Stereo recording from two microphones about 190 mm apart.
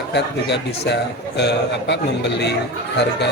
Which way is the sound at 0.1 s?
65° left (ahead or behind).